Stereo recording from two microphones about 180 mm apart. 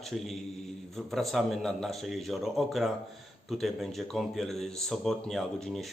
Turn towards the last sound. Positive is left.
turn(degrees=0)  # may be behind; listen again after turning